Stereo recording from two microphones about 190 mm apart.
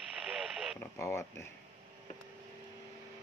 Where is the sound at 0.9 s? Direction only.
15° left (ahead or behind).